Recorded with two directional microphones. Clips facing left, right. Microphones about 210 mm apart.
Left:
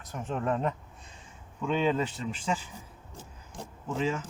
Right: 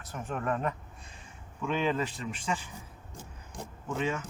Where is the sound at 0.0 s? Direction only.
20° left (ahead or behind).